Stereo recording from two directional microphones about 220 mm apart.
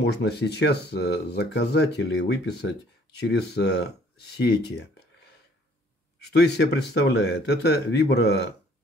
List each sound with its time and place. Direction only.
0.0 s speech: 50° left (ahead or behind)
6.3 s speech: 50° left (ahead or behind)